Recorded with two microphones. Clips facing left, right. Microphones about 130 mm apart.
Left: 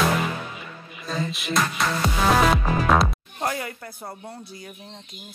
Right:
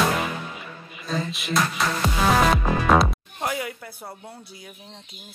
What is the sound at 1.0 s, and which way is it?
Music, centre (ahead or behind).